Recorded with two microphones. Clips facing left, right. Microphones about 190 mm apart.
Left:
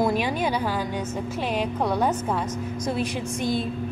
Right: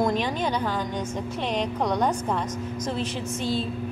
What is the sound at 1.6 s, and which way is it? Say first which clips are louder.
A woman's voice: even; 5° left (ahead or behind).